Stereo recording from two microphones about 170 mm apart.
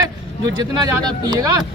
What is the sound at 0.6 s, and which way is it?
Speech, 25° right (ahead or behind).